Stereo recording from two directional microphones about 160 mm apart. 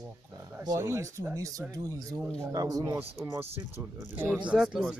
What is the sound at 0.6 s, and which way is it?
Speech, 20° right (ahead or behind).